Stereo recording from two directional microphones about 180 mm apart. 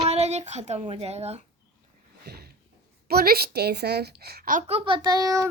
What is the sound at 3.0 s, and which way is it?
A woman's voice, 60° right (ahead or behind).